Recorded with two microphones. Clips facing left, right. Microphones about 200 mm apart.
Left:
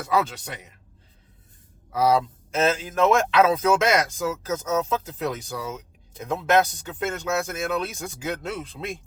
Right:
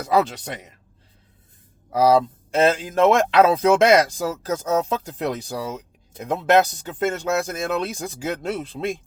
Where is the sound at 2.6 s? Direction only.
35° right (ahead or behind).